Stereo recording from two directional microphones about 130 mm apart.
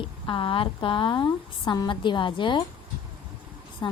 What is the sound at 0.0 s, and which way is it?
Speech, 40° left (ahead or behind).